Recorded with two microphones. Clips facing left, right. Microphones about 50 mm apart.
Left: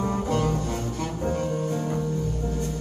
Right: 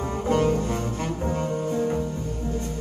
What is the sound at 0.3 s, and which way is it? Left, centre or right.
Music, right.